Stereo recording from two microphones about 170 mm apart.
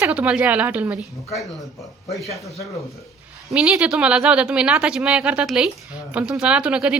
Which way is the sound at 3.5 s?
5° right (ahead or behind).